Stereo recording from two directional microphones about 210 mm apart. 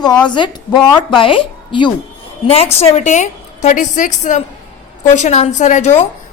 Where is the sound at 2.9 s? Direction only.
35° left (ahead or behind).